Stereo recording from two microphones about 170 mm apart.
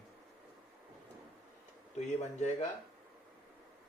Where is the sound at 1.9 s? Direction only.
40° left (ahead or behind).